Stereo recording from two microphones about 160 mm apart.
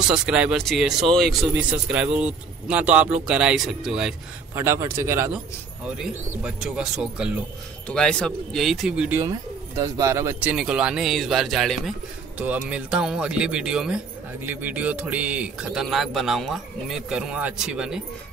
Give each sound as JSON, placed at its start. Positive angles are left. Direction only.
{"t": 0.1, "sound": "speech", "side_deg": -5}
{"t": 4.6, "sound": "a man's voice", "side_deg": -15}
{"t": 5.9, "sound": "speech", "side_deg": -5}
{"t": 7.9, "sound": "speech", "side_deg": 5}
{"t": 9.8, "sound": "speech", "side_deg": -20}
{"t": 10.5, "sound": "speech", "side_deg": -5}